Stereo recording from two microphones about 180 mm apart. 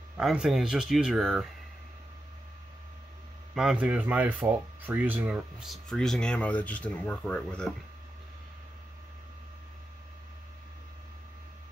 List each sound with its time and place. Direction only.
0.2 s speech: centre (ahead or behind)
3.5 s speech: 5° right (ahead or behind)